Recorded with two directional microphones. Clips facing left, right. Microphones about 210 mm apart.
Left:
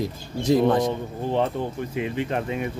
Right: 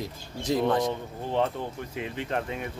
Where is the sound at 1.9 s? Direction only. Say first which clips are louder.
Left 4 dB; 10° left (ahead or behind).